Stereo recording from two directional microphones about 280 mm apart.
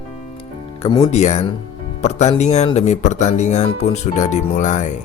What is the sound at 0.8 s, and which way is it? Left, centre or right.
Speech, centre.